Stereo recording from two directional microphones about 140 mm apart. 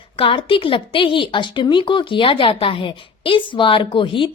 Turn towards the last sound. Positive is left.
turn(degrees=35)  # may be behind; listen again after turning